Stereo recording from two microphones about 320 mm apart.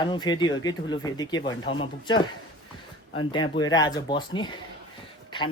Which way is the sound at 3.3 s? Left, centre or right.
Centre.